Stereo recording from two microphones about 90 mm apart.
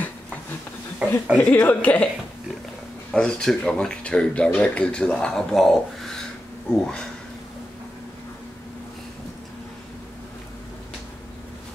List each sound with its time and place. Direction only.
0.9 s speech: 15° right (ahead or behind)
1.4 s speech: 20° left (ahead or behind)
3.1 s speech: 10° left (ahead or behind)